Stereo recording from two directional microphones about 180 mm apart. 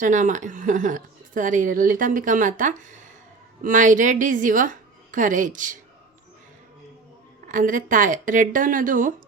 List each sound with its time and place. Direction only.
0.0 s a woman's voice: 45° right (ahead or behind)
7.4 s a woman's voice: 45° right (ahead or behind)